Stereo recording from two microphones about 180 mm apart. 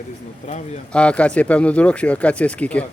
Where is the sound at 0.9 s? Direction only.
5° left (ahead or behind).